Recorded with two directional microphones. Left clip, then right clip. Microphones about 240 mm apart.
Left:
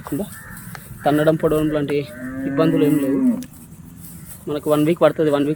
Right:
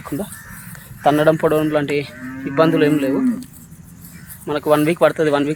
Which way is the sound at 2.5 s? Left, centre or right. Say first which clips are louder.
Right 3 dB; centre.